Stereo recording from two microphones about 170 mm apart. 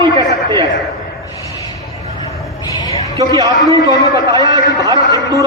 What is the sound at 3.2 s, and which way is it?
A man's voice, 20° right (ahead or behind).